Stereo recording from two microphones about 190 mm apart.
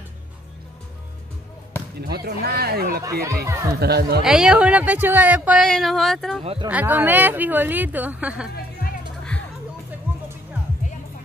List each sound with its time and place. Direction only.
2.0 s speech: 55° right (ahead or behind)
3.0 s speech: 15° right (ahead or behind)
3.8 s speech: 55° right (ahead or behind)
4.2 s speech: 5° right (ahead or behind)
6.4 s speech: 30° right (ahead or behind)
6.7 s speech: 10° right (ahead or behind)
10.1 s music: 10° right (ahead or behind)